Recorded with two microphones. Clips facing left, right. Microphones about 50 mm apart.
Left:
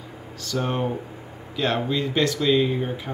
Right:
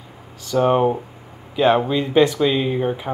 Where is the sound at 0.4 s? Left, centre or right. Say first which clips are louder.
Right 9 dB; centre.